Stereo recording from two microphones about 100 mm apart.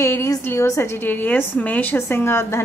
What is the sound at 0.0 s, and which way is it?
A woman's voice, 30° left (ahead or behind).